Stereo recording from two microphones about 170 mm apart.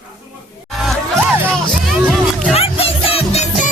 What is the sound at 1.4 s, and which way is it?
Music, centre (ahead or behind).